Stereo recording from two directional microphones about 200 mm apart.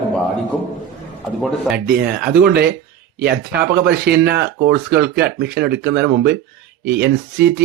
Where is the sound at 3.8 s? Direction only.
55° right (ahead or behind).